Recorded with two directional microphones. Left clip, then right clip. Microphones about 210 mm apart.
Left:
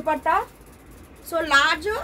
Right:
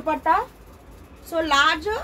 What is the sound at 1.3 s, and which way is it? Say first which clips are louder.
Speech: even; 15° left (ahead or behind).